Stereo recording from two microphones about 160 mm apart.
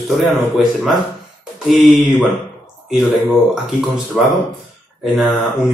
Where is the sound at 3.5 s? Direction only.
Centre (ahead or behind).